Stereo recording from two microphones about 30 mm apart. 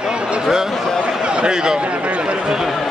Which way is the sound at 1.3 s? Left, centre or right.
Right.